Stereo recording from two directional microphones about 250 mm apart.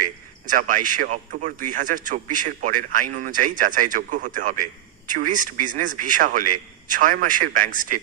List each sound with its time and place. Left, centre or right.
0.0 s speech: right